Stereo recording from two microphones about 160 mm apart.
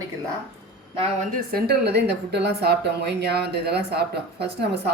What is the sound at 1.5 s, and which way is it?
A woman's voice, 75° right (ahead or behind).